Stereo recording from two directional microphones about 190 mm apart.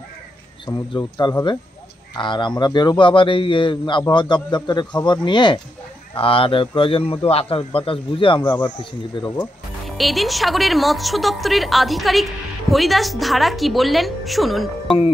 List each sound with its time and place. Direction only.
0.7 s a man's voice: 20° left (ahead or behind)
9.4 s speech: centre (ahead or behind)